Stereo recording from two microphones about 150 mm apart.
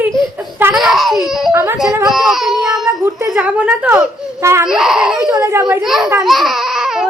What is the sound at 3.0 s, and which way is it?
A woman's voice, 20° right (ahead or behind).